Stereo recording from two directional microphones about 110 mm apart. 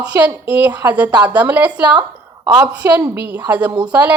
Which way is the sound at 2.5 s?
40° right (ahead or behind).